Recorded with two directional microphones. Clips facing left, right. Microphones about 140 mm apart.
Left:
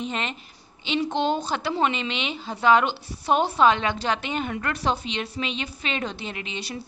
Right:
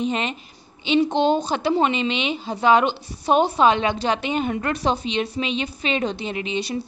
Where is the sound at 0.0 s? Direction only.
15° right (ahead or behind).